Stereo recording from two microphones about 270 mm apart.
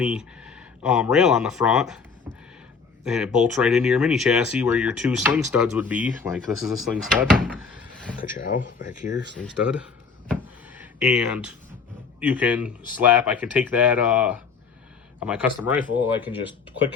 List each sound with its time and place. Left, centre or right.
0.0 s speech: centre
3.0 s speech: centre
8.2 s speech: left
9.4 s speech: centre